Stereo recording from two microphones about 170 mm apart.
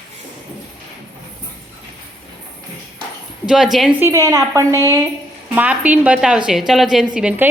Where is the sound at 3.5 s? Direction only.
5° right (ahead or behind).